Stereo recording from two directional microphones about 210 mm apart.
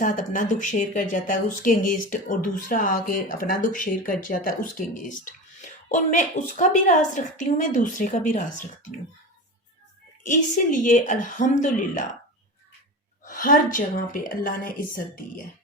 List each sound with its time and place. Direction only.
0.0 s speech: 40° left (ahead or behind)
10.2 s speech: 40° left (ahead or behind)
13.2 s speech: 40° left (ahead or behind)